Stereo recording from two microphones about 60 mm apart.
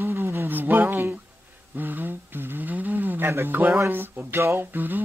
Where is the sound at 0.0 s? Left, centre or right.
Right.